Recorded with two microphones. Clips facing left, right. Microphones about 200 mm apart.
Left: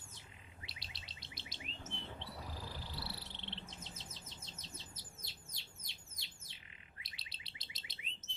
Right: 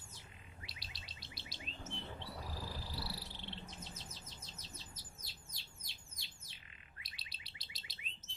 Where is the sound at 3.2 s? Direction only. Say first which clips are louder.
Right 1 dB; 25° left (ahead or behind).